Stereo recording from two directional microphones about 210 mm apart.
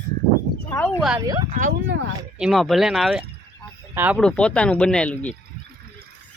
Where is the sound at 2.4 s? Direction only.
Centre (ahead or behind).